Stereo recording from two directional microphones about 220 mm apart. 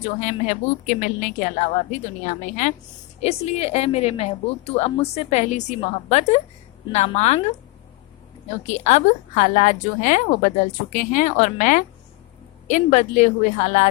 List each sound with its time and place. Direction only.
0.2 s a woman's voice: 35° left (ahead or behind)
8.6 s a woman's voice: 30° left (ahead or behind)